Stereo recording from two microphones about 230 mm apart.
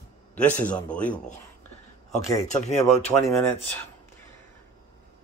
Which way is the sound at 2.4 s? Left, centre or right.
Left.